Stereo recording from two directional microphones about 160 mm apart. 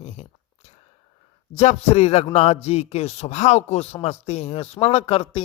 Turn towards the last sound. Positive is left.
turn(degrees=35)  # may be behind; listen again after turning